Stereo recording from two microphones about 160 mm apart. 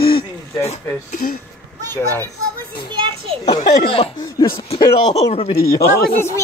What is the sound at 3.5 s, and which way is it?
Speech, 35° left (ahead or behind).